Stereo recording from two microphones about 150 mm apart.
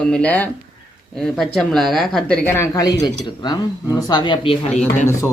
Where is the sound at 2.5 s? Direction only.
15° left (ahead or behind); by 4.8 s 35° left (ahead or behind).